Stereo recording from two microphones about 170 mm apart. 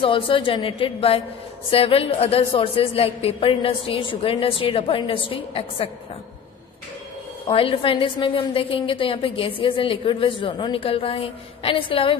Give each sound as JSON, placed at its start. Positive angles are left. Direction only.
{"t": 0.0, "sound": "a woman's voice", "side_deg": 30}
{"t": 7.4, "sound": "a woman's voice", "side_deg": 35}